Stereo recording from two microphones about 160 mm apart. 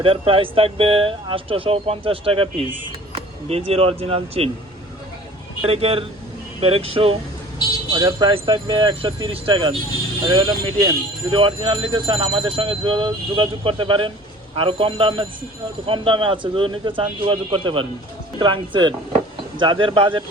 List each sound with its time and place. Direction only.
0.0 s speech: 35° right (ahead or behind)
5.6 s speech: 35° right (ahead or behind)